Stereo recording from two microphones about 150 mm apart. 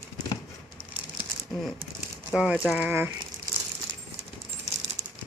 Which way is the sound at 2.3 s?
5° right (ahead or behind).